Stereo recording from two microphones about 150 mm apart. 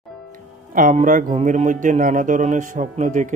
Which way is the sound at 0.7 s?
60° right (ahead or behind).